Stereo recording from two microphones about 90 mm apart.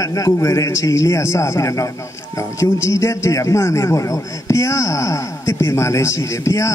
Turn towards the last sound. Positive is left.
turn(degrees=35)  # may be behind; listen again after turning